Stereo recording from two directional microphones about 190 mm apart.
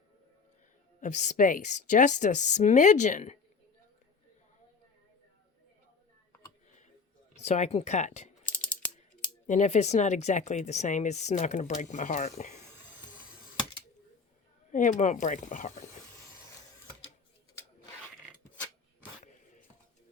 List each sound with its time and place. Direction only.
1.0 s speech: 40° left (ahead or behind)
7.3 s speech: 35° left (ahead or behind)
9.5 s speech: 40° left (ahead or behind)
14.7 s speech: 40° left (ahead or behind)